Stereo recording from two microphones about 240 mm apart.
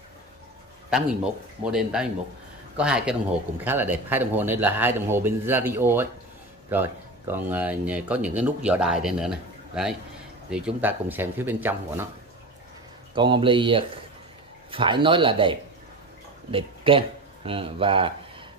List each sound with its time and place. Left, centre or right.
0.8 s a man's voice: centre
13.1 s speech: centre